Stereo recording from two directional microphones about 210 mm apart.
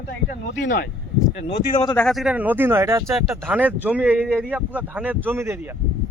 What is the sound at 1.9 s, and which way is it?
A man's voice, centre (ahead or behind).